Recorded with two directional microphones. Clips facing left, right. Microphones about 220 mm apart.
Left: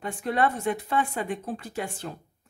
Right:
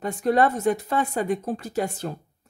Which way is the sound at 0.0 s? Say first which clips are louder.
Right 5 dB; 40° right (ahead or behind).